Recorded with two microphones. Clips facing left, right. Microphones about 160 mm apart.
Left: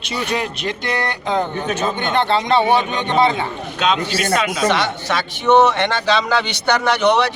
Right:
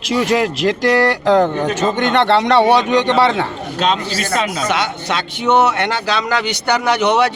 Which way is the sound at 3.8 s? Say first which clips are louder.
Right 1 dB; 35° right (ahead or behind).